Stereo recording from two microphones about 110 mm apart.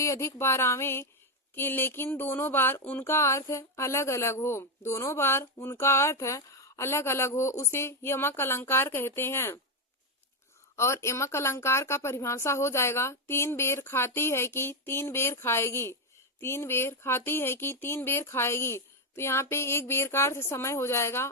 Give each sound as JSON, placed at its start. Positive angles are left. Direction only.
{"t": 0.0, "sound": "speech", "side_deg": 30}
{"t": 10.8, "sound": "speech", "side_deg": 25}